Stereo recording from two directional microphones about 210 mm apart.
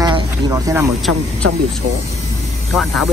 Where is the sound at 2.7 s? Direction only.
Centre (ahead or behind).